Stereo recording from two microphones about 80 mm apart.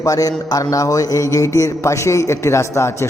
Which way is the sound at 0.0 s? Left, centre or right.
Left.